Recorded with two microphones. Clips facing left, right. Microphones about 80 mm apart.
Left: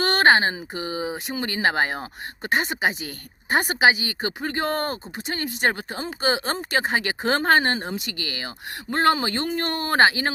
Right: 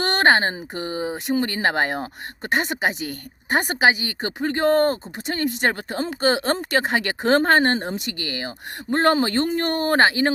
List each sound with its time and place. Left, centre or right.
0.0 s a woman's voice: right
7.3 s speech: right